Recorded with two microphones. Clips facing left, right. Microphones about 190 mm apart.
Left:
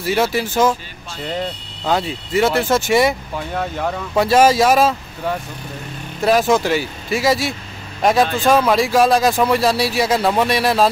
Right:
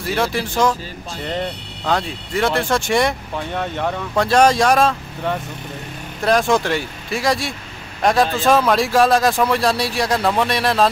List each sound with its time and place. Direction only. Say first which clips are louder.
0.0 s speech: left 3 dB; 5° left (ahead or behind)
1.9 s speech: left 2 dB; 5° left (ahead or behind)